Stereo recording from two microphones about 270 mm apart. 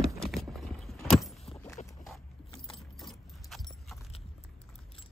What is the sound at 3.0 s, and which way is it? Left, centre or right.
Keys jangling, centre.